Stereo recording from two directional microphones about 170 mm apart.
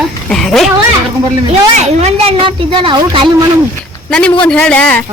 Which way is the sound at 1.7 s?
40° right (ahead or behind).